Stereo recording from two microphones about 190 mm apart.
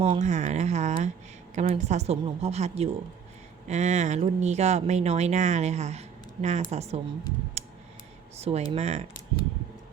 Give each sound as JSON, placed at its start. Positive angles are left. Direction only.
{"t": 0.0, "sound": "speech", "side_deg": -35}
{"t": 8.4, "sound": "speech", "side_deg": -35}